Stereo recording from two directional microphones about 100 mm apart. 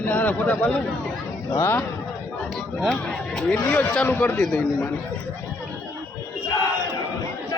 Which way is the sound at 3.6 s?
20° left (ahead or behind).